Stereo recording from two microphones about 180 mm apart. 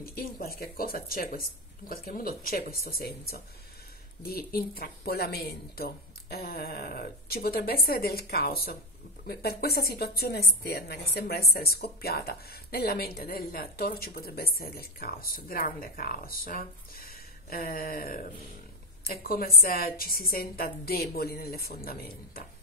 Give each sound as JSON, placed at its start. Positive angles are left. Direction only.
{"t": 0.0, "sound": "a woman's voice", "side_deg": 55}